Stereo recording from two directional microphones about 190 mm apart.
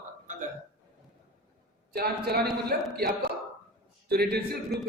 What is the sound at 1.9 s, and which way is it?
A man's voice, 55° right (ahead or behind).